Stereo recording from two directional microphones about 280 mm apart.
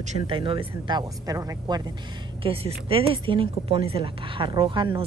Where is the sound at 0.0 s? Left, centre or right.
Right.